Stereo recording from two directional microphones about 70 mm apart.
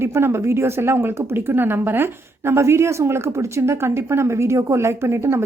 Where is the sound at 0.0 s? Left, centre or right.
Right.